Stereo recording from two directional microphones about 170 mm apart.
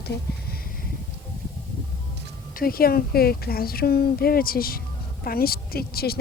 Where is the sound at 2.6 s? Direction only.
60° left (ahead or behind).